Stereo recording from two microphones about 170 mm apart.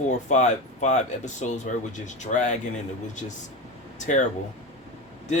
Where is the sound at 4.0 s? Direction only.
45° left (ahead or behind).